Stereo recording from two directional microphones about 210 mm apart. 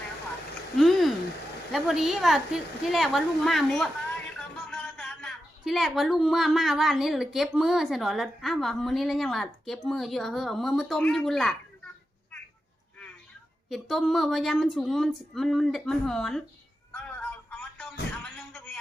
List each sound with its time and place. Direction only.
0.8 s a sound: centre (ahead or behind)
1.7 s a woman's voice: centre (ahead or behind)
13.7 s a woman's voice: centre (ahead or behind)
16.9 s music: 5° left (ahead or behind)